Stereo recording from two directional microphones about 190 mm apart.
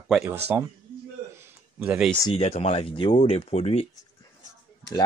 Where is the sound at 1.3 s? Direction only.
5° right (ahead or behind).